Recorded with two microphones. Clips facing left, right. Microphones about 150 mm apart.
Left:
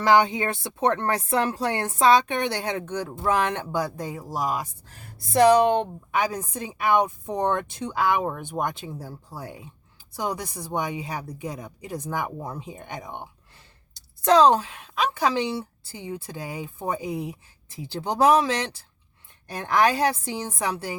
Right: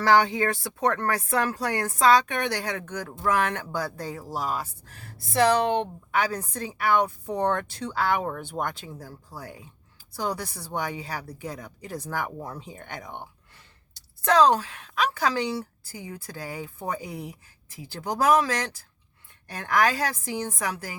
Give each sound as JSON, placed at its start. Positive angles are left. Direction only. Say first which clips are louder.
{"t": 0.0, "sound": "a woman's voice", "louder": "left 1 dB", "side_deg": 20}
{"t": 14.3, "sound": "a woman's voice", "louder": "left 3 dB", "side_deg": 25}